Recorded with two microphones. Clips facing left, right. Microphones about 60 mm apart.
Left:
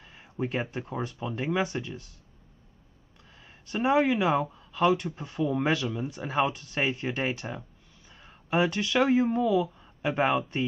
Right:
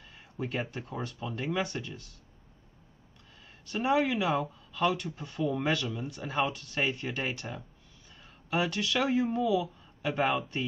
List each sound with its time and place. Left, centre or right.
0.0 s speech: centre
3.7 s speech: centre
8.2 s a sound: centre
9.6 s speech: centre